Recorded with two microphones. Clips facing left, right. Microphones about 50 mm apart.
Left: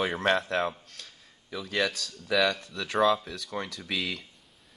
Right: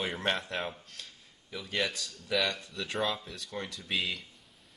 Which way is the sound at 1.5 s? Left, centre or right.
Left.